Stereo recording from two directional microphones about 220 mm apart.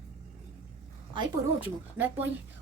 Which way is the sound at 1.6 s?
10° right (ahead or behind).